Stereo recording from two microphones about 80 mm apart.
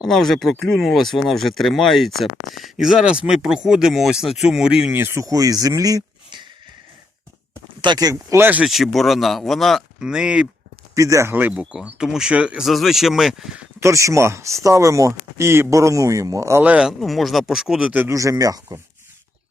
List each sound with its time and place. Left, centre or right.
0.0 s speech: centre
4.9 s speech: right
5.2 s speech: right
8.1 s speech: right
8.6 s speech: centre
10.0 s speech: centre
10.9 s speech: right
11.3 s speech: right
11.7 s speech: centre
12.6 s speech: centre
13.7 s speech: right
16.6 s speech: centre
17.0 s speech: centre
18.1 s speech: right